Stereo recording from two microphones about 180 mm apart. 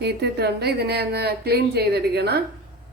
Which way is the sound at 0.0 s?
65° right (ahead or behind).